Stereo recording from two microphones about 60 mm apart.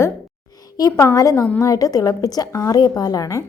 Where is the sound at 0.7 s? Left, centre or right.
Left.